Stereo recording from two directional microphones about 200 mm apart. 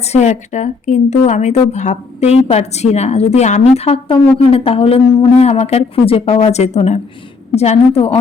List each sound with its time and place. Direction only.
0.0 s a woman's voice: 35° left (ahead or behind)